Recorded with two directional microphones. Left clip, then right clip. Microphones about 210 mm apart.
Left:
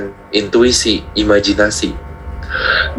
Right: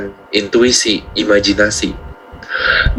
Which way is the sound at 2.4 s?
15° right (ahead or behind).